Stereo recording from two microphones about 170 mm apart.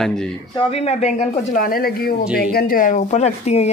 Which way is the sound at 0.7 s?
40° left (ahead or behind).